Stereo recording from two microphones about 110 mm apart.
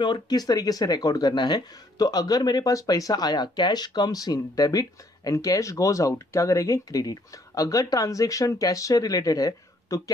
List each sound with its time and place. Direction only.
0.0 s speech: 40° left (ahead or behind)